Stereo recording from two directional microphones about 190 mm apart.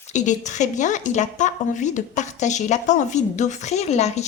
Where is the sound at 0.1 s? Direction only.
40° left (ahead or behind).